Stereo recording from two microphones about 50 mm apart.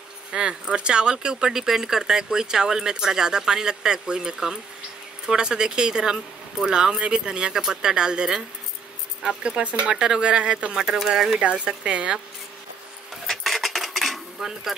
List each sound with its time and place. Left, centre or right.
0.3 s speech: centre
11.4 s speech: right
13.3 s cutlery: centre